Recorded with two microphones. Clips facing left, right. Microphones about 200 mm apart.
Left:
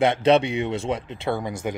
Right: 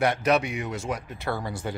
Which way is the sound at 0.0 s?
25° left (ahead or behind).